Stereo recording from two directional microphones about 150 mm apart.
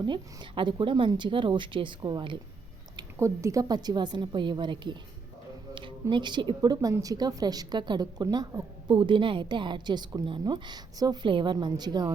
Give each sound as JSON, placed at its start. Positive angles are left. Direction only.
{"t": 0.1, "sound": "speech", "side_deg": -35}
{"t": 2.9, "sound": "a woman's voice", "side_deg": -20}